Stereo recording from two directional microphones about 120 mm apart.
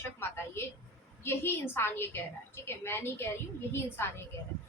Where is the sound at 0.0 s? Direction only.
20° left (ahead or behind).